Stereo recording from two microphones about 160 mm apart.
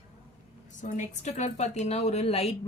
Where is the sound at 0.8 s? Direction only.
45° left (ahead or behind).